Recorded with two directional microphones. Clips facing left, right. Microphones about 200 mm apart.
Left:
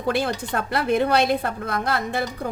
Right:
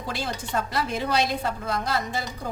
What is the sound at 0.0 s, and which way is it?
A woman's voice, 60° left (ahead or behind).